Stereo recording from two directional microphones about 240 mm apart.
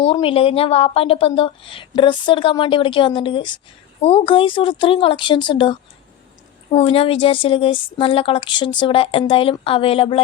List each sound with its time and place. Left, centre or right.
0.0 s a woman's voice: left
6.7 s a woman's voice: left